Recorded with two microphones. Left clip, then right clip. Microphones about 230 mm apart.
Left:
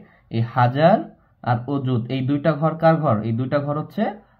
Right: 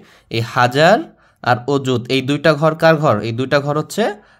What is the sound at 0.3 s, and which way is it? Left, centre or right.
Speech, right.